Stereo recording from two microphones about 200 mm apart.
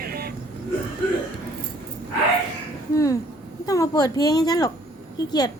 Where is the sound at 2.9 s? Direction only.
15° left (ahead or behind).